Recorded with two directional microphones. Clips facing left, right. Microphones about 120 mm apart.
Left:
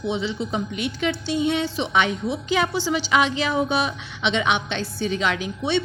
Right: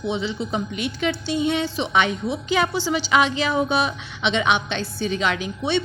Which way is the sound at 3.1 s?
50° right (ahead or behind).